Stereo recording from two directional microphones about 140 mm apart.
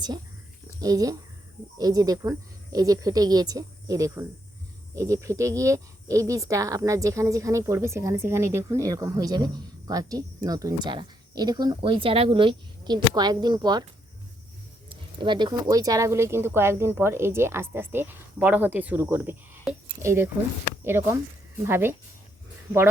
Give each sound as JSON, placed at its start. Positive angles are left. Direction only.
{"t": 0.8, "sound": "speech", "side_deg": -25}
{"t": 14.8, "sound": "speech", "side_deg": -35}